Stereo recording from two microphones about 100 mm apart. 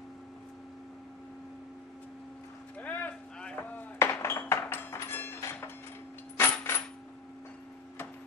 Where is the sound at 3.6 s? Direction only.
20° left (ahead or behind).